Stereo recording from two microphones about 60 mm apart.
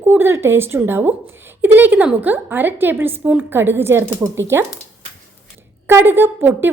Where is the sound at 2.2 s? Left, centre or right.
Right.